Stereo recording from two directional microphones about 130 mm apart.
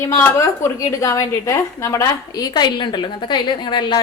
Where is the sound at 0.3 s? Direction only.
25° left (ahead or behind).